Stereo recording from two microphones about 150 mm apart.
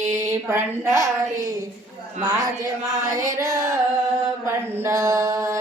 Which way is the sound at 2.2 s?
25° right (ahead or behind).